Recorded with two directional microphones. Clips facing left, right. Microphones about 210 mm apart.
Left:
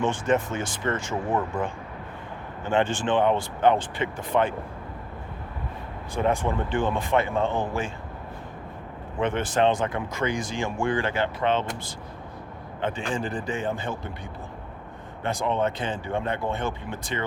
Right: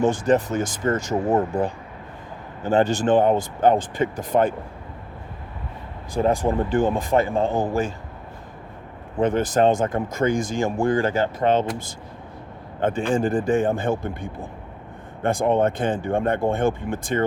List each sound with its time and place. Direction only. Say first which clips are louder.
0.0 s speech: right 5 dB; 35° right (ahead or behind)
6.1 s speech: right 4 dB; 35° right (ahead or behind)
9.2 s speech: right 4 dB; 40° right (ahead or behind)